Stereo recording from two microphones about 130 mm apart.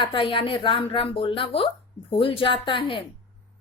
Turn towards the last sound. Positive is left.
turn(degrees=40)  # may be behind; listen again after turning